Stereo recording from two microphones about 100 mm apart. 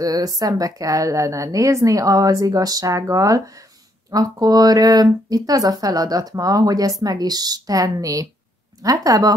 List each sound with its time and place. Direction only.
0.0 s speech: 40° right (ahead or behind)